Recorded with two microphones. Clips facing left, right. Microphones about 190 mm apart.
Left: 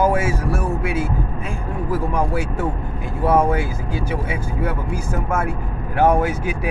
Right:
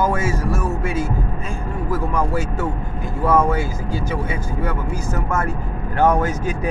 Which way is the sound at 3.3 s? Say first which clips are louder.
Left 1 dB; 10° left (ahead or behind).